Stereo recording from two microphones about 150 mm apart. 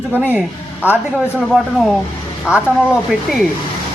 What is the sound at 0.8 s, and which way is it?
Speech, 10° right (ahead or behind).